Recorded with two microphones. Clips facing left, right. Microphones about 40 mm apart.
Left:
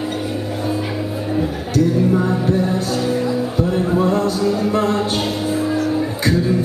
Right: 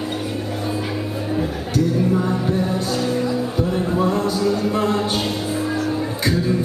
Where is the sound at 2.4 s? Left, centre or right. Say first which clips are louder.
Left 3 dB; centre.